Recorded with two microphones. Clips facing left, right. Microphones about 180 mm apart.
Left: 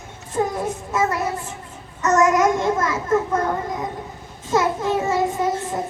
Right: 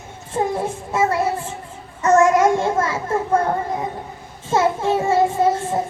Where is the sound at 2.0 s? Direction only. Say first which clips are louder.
Right 3 dB; 30° right (ahead or behind).